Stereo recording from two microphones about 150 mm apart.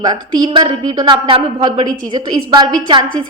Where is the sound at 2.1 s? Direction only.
30° right (ahead or behind).